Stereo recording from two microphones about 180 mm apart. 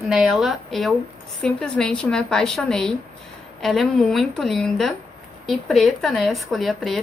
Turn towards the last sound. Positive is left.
turn(degrees=0)  # may be behind; listen again after turning